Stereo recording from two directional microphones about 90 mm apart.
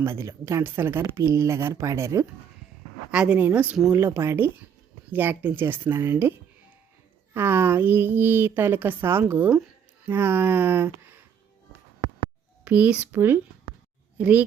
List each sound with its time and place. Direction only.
0.0 s speech: 30° right (ahead or behind)
3.1 s a woman's voice: 10° right (ahead or behind)
3.9 s a woman's voice: 25° right (ahead or behind)
7.3 s a woman's voice: 25° right (ahead or behind)
12.6 s a child's voice: 15° right (ahead or behind)